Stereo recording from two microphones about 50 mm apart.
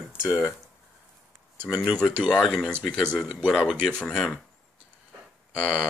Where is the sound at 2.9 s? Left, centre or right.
Right.